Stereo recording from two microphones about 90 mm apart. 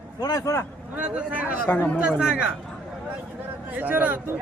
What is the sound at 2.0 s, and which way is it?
Speech, 10° right (ahead or behind).